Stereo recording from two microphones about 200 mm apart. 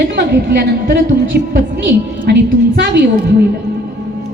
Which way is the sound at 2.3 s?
55° right (ahead or behind).